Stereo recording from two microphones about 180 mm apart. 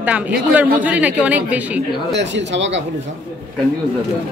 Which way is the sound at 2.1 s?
80° right.